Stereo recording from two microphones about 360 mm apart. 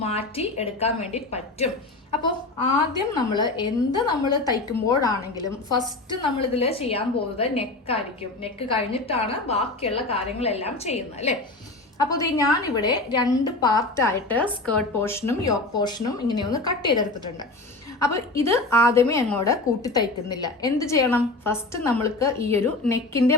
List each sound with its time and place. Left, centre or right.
0.0 s a woman's voice: centre